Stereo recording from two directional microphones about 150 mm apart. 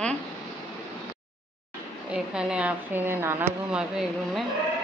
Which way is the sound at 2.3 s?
10° right (ahead or behind).